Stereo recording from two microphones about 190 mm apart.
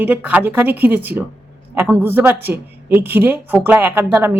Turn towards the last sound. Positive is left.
turn(degrees=-10)  # may be behind; listen again after turning